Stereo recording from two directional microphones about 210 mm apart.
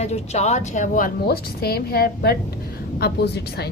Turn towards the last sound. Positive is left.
turn(degrees=50)  # may be behind; listen again after turning